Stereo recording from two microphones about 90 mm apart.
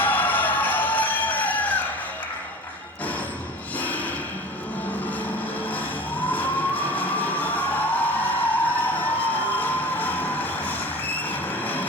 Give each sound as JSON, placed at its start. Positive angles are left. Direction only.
{"t": 0.0, "sound": "music", "side_deg": 20}
{"t": 3.8, "sound": "a sound", "side_deg": 15}
{"t": 6.1, "sound": "fire engine", "side_deg": 20}
{"t": 11.6, "sound": "vehicle", "side_deg": 20}